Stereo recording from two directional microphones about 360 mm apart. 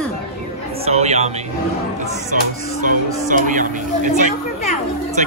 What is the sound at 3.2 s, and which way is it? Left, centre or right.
Speech, right.